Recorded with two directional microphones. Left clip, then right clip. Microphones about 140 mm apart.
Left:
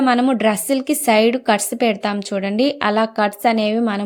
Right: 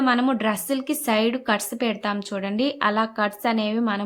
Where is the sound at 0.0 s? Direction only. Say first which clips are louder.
Left 6 dB; 35° left (ahead or behind).